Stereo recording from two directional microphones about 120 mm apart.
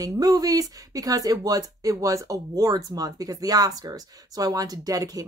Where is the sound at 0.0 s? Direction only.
30° right (ahead or behind).